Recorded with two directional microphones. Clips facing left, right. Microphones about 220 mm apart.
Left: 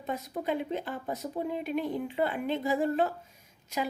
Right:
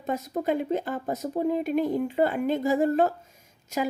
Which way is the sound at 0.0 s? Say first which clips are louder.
Right 5 dB; 45° right (ahead or behind).